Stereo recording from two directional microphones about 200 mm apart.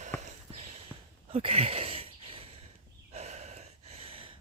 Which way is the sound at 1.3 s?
30° right (ahead or behind).